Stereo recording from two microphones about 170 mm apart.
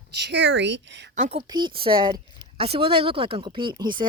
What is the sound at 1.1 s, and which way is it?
Speech, 40° right (ahead or behind).